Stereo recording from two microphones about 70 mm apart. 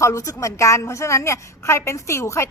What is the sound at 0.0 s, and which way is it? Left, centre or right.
A woman's voice, left.